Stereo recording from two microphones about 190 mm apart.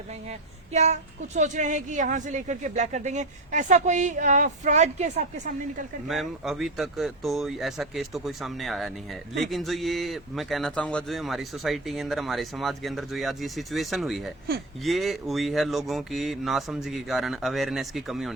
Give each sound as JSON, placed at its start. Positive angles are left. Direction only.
{"t": 0.3, "sound": "a woman's voice", "side_deg": -35}
{"t": 6.1, "sound": "a man's voice", "side_deg": 0}